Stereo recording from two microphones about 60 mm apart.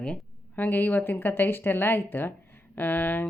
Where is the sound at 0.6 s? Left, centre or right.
Left.